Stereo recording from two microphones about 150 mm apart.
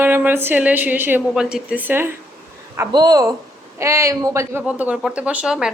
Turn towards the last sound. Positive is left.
turn(degrees=-5)  # may be behind; listen again after turning